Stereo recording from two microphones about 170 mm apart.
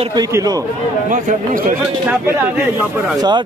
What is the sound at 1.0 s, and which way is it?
Speech, 50° right (ahead or behind).